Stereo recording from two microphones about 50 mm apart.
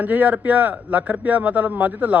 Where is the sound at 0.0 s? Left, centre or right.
Right.